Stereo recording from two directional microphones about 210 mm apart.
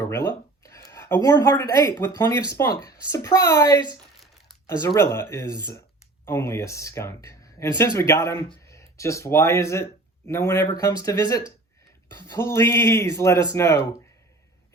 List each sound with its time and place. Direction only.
0.6 s speech: 15° left (ahead or behind)
4.9 s speech: 10° left (ahead or behind)
6.2 s speech: 10° left (ahead or behind)